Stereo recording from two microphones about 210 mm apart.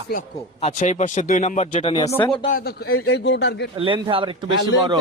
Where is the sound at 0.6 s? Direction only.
35° left (ahead or behind).